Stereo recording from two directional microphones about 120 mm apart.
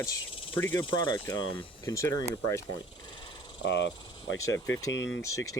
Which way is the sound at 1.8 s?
25° left (ahead or behind).